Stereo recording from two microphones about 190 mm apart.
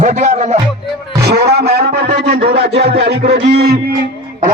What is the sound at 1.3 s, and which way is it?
A man's voice, 60° right (ahead or behind).